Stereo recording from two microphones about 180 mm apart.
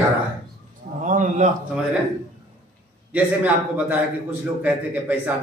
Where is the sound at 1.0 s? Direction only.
45° right (ahead or behind).